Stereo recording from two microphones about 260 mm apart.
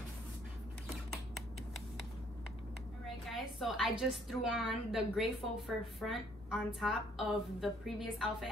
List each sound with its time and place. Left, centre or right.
3.3 s a woman's voice: centre